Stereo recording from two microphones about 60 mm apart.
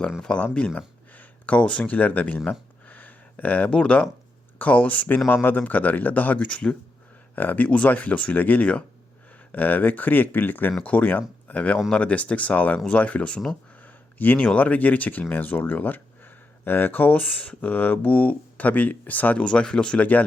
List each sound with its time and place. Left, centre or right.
0.2 s speech: centre
2.8 s a sound: left
3.7 s speech: left
7.3 s speech: left
19.5 s speech: centre